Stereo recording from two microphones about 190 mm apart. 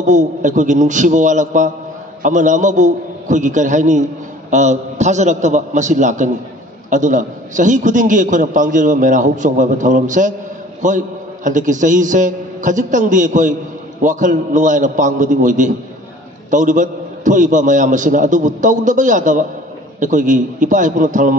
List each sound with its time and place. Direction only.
0.0 s a man's voice: 40° right (ahead or behind)